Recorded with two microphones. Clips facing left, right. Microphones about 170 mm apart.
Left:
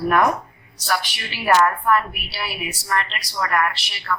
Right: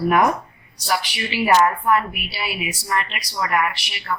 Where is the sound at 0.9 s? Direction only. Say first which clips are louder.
Right 2 dB; 10° right (ahead or behind).